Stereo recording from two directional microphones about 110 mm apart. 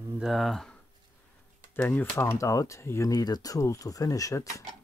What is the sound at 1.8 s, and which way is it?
Speech, 15° left (ahead or behind).